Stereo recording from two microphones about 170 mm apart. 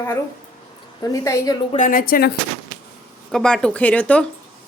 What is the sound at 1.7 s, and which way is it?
Speech, 50° left (ahead or behind).